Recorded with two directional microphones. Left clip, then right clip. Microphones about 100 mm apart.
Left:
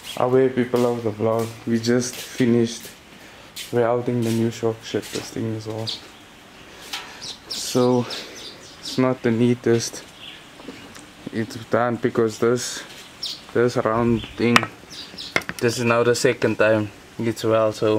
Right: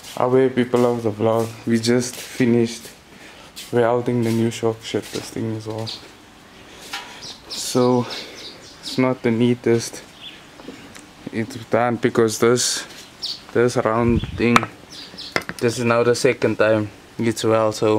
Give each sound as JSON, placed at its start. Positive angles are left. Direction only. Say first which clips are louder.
{"t": 0.2, "sound": "speech", "louder": "right 1 dB", "side_deg": -5}
{"t": 0.6, "sound": "speech", "louder": "right 2 dB", "side_deg": -20}
{"t": 1.7, "sound": "speech", "louder": "right 1 dB", "side_deg": -10}
{"t": 3.7, "sound": "speech", "louder": "right 2 dB", "side_deg": -15}
{"t": 7.5, "sound": "speech", "louder": "right 1 dB", "side_deg": 0}
{"t": 11.3, "sound": "speech", "louder": "right 2 dB", "side_deg": 0}
{"t": 11.9, "sound": "speech", "louder": "right 3 dB", "side_deg": -25}
{"t": 13.2, "sound": "speech", "louder": "right 2 dB", "side_deg": -10}
{"t": 17.2, "sound": "speech", "louder": "right 1 dB", "side_deg": -20}